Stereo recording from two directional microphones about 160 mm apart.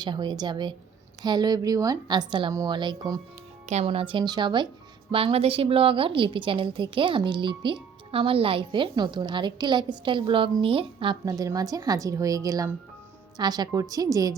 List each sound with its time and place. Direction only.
0.0 s a woman's voice: 30° right (ahead or behind)
3.7 s a woman's voice: 40° right (ahead or behind); by 14.3 s 20° right (ahead or behind)